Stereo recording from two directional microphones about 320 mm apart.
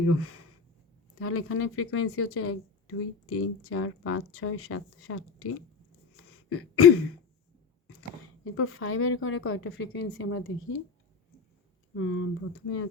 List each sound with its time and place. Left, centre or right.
0.1 s speech: left
8.4 s a woman's voice: left
11.9 s a woman's voice: left